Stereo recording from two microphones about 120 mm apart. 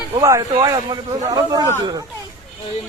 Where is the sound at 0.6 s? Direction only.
35° right (ahead or behind).